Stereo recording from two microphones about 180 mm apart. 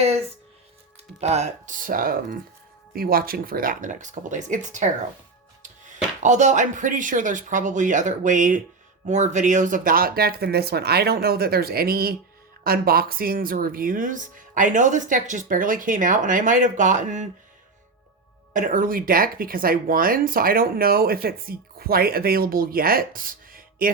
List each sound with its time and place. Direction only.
0.0 s music: 35° right (ahead or behind)
1.2 s speech: 40° right (ahead or behind)
5.6 s music: 45° right (ahead or behind)
6.2 s speech: 40° right (ahead or behind)
18.5 s speech: 50° right (ahead or behind)